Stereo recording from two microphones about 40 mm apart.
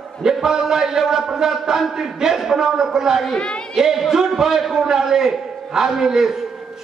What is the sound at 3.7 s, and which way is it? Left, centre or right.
A man's voice, centre.